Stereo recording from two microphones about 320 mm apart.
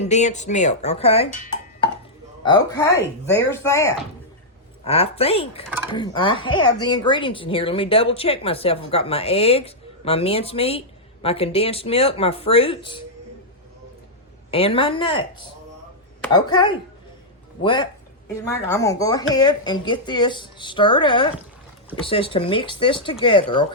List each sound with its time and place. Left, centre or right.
0.0 s speech: left
2.4 s speech: centre
14.5 s speech: centre